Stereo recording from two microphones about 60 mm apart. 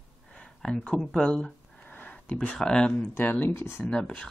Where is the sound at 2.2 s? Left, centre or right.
Centre.